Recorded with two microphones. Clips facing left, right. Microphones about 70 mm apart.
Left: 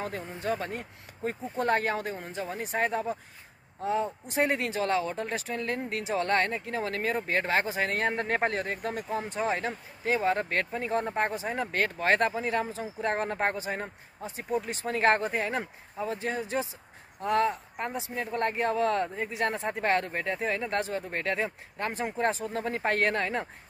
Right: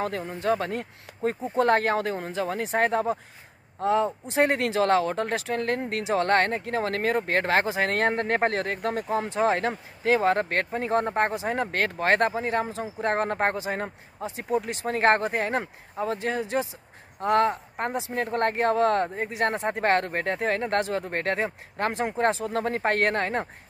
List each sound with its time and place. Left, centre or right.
0.0 s speech: right
2.3 s speech: right
2.8 s speech: right
8.2 s speech: right
14.2 s speech: right
14.9 s speech: right
16.2 s speech: right
19.0 s speech: right
19.3 s speech: right
21.7 s speech: right
22.3 s speech: right